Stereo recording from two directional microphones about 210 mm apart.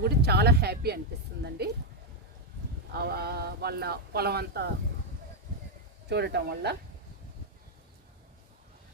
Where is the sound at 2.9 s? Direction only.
50° right (ahead or behind).